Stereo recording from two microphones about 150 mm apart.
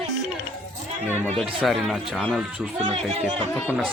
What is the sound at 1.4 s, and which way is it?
Speech, centre (ahead or behind).